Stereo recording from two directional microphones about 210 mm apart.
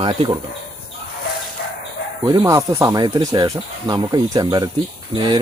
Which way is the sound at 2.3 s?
15° right (ahead or behind).